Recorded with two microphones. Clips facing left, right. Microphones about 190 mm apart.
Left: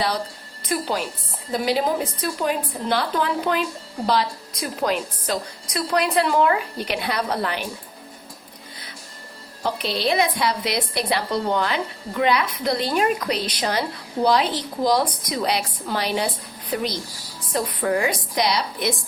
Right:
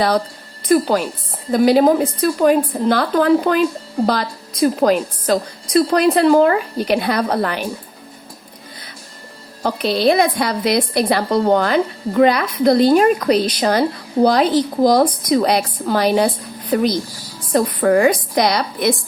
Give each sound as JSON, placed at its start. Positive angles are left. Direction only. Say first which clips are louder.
{"t": 0.7, "sound": "a woman's voice", "louder": "right 10 dB", "side_deg": -50}
{"t": 9.6, "sound": "a woman's voice", "louder": "right 7 dB", "side_deg": -45}